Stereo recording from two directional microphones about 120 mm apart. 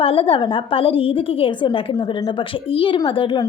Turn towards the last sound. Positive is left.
turn(degrees=45)  # may be behind; listen again after turning